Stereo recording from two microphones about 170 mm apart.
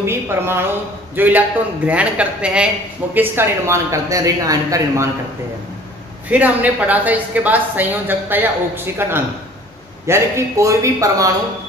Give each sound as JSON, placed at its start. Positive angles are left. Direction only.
{"t": 0.0, "sound": "speech", "side_deg": -15}
{"t": 6.2, "sound": "speech", "side_deg": -10}